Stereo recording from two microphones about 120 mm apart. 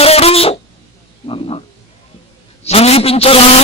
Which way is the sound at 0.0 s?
55° left (ahead or behind).